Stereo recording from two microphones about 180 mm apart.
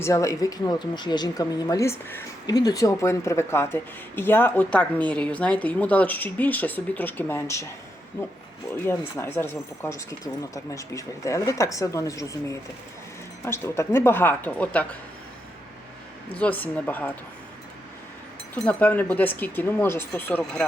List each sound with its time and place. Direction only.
0.0 s speech: 15° left (ahead or behind)
8.8 s speech: 15° left (ahead or behind)
16.3 s speech: 10° left (ahead or behind)
18.5 s speech: 10° left (ahead or behind)